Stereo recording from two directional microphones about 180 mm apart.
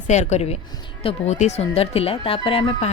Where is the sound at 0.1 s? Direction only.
40° left (ahead or behind).